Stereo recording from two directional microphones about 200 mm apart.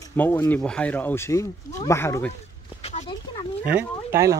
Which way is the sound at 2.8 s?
35° left (ahead or behind).